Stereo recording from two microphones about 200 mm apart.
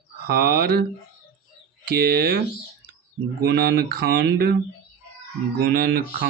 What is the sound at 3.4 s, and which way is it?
Speech, 50° right (ahead or behind).